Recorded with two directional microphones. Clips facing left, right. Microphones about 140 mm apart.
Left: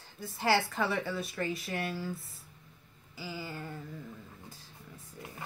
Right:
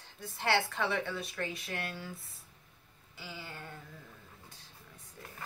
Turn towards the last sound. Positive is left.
turn(degrees=5)  # may be behind; listen again after turning